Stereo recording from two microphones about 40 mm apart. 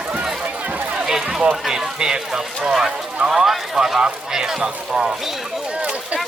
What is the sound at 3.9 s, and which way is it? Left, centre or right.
Speech, centre.